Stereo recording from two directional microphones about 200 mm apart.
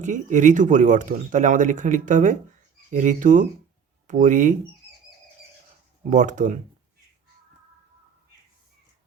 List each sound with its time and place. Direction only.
0.0 s speech: 40° right (ahead or behind)
6.0 s speech: 40° right (ahead or behind)